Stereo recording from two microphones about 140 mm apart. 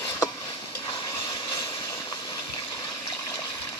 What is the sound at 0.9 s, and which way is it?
Vehicle, 25° left (ahead or behind).